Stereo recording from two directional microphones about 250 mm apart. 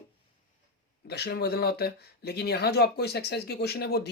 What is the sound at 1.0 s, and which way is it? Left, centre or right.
Speech, left.